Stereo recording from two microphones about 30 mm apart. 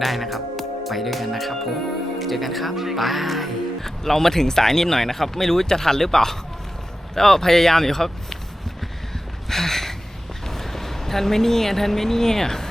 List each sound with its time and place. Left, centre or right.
0.0 s speech: centre
3.8 s speech: centre
9.5 s a sound: centre
10.4 s speech: centre